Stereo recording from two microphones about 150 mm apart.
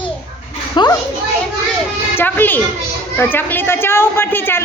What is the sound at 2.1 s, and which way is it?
A woman's voice, 15° left (ahead or behind).